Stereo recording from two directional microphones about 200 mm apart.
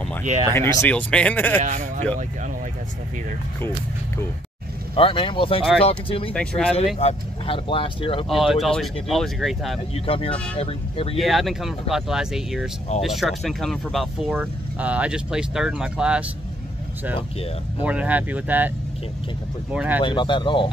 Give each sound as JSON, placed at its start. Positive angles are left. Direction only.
{"t": 0.5, "sound": "speech", "side_deg": 10}
{"t": 1.6, "sound": "speech", "side_deg": -40}
{"t": 4.9, "sound": "speech", "side_deg": 25}
{"t": 6.3, "sound": "speech", "side_deg": 5}
{"t": 7.0, "sound": "speech", "side_deg": 30}
{"t": 8.3, "sound": "speech", "side_deg": 0}
{"t": 9.9, "sound": "speech", "side_deg": 30}
{"t": 11.1, "sound": "speech", "side_deg": 0}
{"t": 17.8, "sound": "speech", "side_deg": -5}
{"t": 19.7, "sound": "speech", "side_deg": -5}
{"t": 20.0, "sound": "speech", "side_deg": 25}